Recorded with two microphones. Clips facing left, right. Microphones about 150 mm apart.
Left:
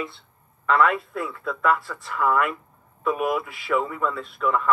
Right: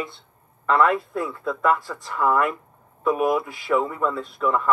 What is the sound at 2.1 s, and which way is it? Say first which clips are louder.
Speech: right 1 dB; 25° right (ahead or behind).